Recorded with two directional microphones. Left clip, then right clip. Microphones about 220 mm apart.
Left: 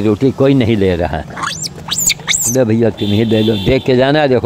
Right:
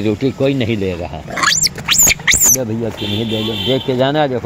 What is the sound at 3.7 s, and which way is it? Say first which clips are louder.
Speech: left 3 dB; 30° left (ahead or behind).